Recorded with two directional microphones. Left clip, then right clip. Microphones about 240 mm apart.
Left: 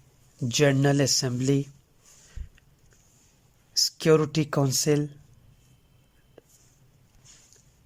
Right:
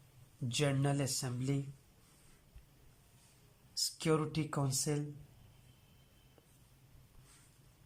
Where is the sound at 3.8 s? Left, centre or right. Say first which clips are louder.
Left 13 dB; left.